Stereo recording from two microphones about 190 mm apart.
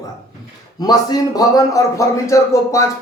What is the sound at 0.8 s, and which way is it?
Speech, 20° left (ahead or behind).